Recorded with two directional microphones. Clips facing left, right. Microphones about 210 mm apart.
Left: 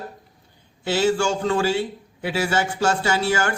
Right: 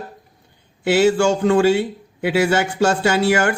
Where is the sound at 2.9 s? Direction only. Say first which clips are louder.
Right 5 dB; 25° right (ahead or behind).